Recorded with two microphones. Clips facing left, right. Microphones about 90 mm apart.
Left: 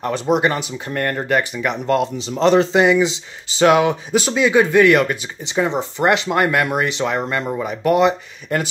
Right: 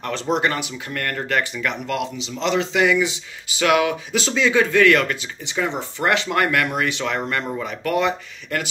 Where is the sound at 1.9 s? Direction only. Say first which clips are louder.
Left 7 dB; 40° left (ahead or behind).